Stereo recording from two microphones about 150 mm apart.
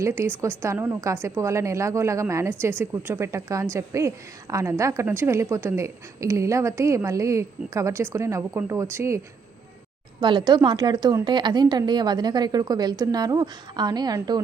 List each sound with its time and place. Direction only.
0.0 s a woman's voice: 20° right (ahead or behind)
10.2 s a woman's voice: 30° right (ahead or behind)